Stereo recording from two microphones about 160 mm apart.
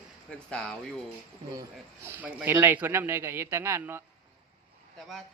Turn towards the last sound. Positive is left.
turn(degrees=-15)  # may be behind; listen again after turning